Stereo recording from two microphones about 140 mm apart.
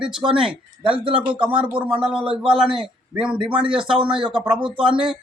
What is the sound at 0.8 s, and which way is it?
Speech, 40° right (ahead or behind).